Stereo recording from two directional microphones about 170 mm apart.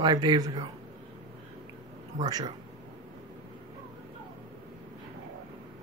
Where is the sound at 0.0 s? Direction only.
25° right (ahead or behind).